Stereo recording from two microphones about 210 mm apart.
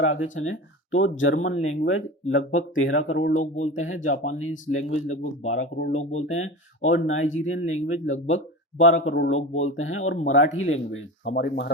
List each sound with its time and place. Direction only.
0.0 s speech: 70° left (ahead or behind)
5.9 s speech: 35° left (ahead or behind)
6.2 s speech: 70° left (ahead or behind)
9.0 s speech: 65° left (ahead or behind)
11.3 s speech: 55° left (ahead or behind)